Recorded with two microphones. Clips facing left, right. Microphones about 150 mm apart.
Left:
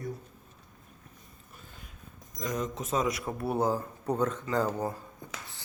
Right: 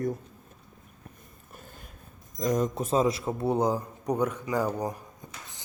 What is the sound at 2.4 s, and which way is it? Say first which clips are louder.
Speech: right 7 dB; 40° right (ahead or behind).